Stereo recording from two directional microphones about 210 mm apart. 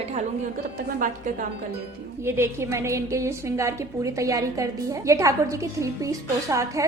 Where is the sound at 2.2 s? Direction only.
10° right (ahead or behind).